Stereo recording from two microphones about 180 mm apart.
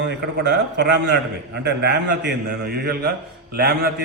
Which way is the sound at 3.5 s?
60° right (ahead or behind).